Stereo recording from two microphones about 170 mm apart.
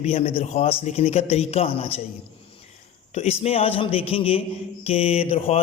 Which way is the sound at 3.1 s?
40° left (ahead or behind).